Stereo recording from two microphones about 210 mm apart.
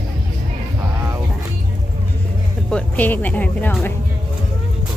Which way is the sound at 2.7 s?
10° left (ahead or behind).